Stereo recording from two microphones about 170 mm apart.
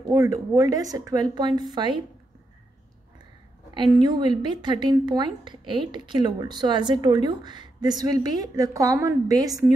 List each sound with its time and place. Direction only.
0.1 s speech: 20° right (ahead or behind)
3.7 s speech: 25° right (ahead or behind)